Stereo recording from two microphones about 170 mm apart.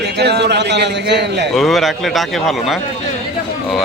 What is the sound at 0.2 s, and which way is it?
A man's voice, 80° right.